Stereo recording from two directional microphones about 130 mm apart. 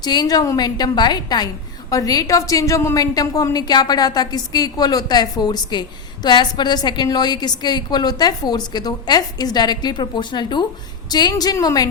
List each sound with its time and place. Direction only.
0.0 s a woman's voice: 30° left (ahead or behind)